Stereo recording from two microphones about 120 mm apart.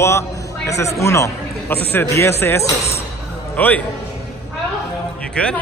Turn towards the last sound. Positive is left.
turn(degrees=10)  # may be behind; listen again after turning